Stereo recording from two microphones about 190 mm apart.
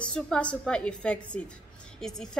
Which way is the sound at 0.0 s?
5° left (ahead or behind).